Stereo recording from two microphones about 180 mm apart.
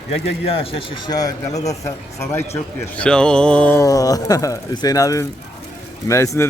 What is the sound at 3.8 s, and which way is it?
A man's voice, 20° left (ahead or behind).